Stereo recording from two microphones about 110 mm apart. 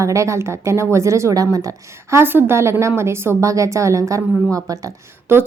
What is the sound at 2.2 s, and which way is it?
A woman's voice, 20° right (ahead or behind).